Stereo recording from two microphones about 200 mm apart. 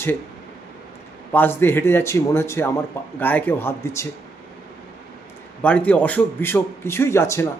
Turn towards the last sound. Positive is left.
turn(degrees=15)  # may be behind; listen again after turning